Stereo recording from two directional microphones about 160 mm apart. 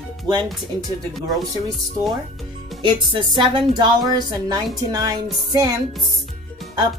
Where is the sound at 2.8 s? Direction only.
30° right (ahead or behind).